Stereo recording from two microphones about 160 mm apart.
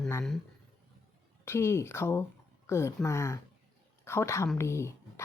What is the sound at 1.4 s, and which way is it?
A woman's voice, 15° left (ahead or behind).